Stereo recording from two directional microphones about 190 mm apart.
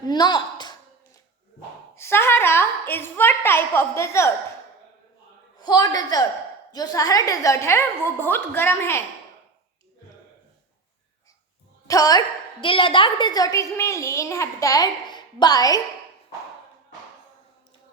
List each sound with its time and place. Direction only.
0.0 s a sound: 20° left (ahead or behind)
2.0 s a woman's voice: 10° left (ahead or behind)
5.5 s a woman's voice: 20° left (ahead or behind)
11.9 s a woman's voice: 20° left (ahead or behind)